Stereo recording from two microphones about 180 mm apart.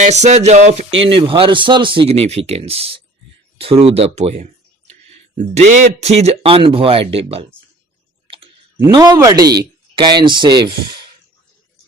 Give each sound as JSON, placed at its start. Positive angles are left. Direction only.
{"t": 0.0, "sound": "speech", "side_deg": -40}
{"t": 8.9, "sound": "speech", "side_deg": -20}